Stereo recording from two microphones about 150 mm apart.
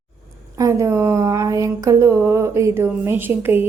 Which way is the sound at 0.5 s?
20° right (ahead or behind).